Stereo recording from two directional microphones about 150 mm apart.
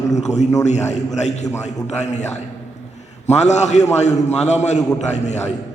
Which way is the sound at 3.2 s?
50° left (ahead or behind).